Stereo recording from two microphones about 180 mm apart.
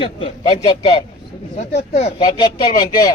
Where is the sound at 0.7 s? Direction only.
30° left (ahead or behind).